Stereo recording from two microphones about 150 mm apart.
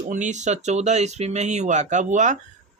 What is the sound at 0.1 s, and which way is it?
Speech, 55° right (ahead or behind).